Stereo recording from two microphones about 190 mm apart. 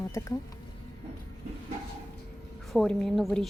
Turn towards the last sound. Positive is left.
turn(degrees=0)  # may be behind; listen again after turning